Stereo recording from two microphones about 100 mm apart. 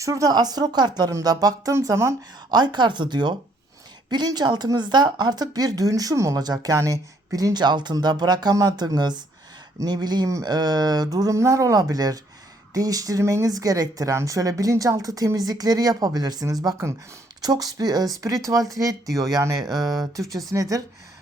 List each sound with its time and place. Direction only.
0.0 s speech: 35° right (ahead or behind)
1.7 s speech: 30° right (ahead or behind)
2.5 s a woman's voice: 45° right (ahead or behind)